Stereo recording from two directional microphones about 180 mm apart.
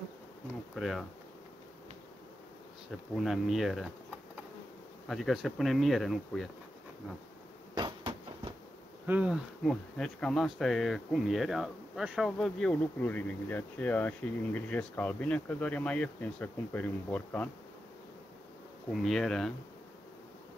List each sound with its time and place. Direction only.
0.7 s speech: centre (ahead or behind)
2.9 s speech: centre (ahead or behind)
5.0 s speech: centre (ahead or behind)
7.7 s a sound: 25° right (ahead or behind)
9.0 s speech: 10° right (ahead or behind); by 17.5 s 10° left (ahead or behind)
18.9 s speech: centre (ahead or behind)